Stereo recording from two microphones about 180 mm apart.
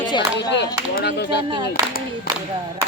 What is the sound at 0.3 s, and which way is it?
Speech, 75° left (ahead or behind).